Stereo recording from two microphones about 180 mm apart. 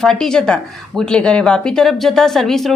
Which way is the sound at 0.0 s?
5° left (ahead or behind).